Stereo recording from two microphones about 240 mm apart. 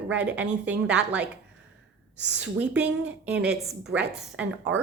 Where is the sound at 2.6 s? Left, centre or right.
Centre.